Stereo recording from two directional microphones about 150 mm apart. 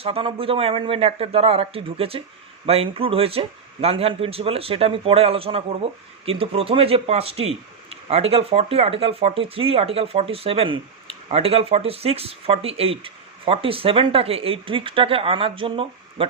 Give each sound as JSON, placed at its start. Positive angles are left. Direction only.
{"t": 0.0, "sound": "speech", "side_deg": -40}